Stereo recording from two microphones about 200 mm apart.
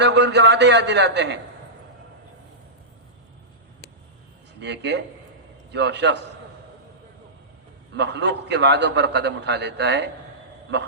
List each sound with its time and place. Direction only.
0.0 s a man's voice: 60° right (ahead or behind)
4.6 s a man's voice: 60° right (ahead or behind)
7.9 s a man's voice: 60° right (ahead or behind)